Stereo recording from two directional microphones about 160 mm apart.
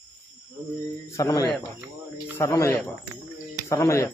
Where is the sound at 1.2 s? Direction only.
20° left (ahead or behind).